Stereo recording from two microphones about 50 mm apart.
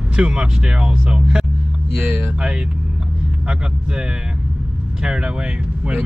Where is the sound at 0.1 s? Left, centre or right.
Centre.